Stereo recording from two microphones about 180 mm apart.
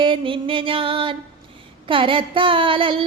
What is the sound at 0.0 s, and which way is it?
Music, 30° right (ahead or behind).